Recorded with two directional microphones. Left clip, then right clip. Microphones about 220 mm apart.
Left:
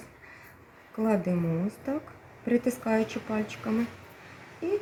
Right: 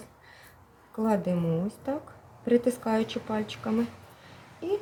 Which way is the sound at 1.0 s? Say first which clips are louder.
Even; 5° right (ahead or behind).